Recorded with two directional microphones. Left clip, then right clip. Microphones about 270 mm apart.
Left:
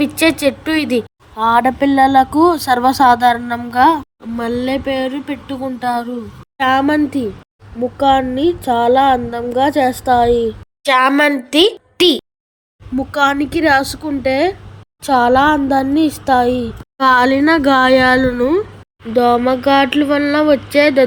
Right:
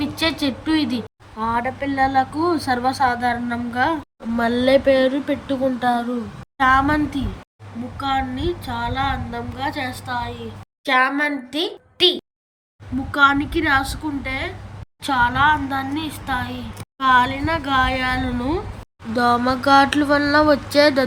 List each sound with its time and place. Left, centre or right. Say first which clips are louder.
0.0 s a woman's voice: left 8 dB; centre
4.4 s speech: right 2 dB; centre
13.1 s speech: left 1 dB; centre